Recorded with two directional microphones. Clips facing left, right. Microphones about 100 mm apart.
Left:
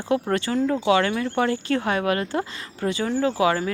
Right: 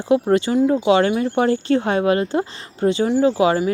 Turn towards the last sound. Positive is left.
turn(degrees=-20)  # may be behind; listen again after turning